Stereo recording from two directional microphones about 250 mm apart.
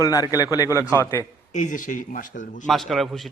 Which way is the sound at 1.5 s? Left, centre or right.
Left.